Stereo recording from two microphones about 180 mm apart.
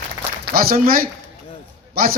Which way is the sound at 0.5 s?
55° right (ahead or behind).